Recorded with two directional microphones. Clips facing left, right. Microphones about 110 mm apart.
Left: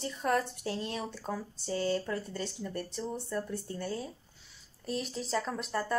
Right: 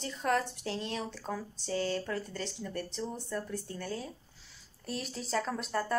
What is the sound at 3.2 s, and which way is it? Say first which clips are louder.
Speech: left 1 dB; centre (ahead or behind).